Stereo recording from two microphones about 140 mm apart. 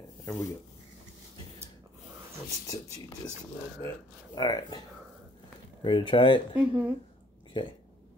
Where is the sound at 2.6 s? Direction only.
25° left (ahead or behind).